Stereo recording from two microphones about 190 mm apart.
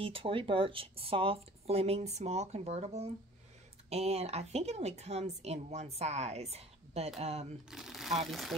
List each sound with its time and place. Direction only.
0.0 s a woman's voice: 30° right (ahead or behind)
7.7 s speech: centre (ahead or behind)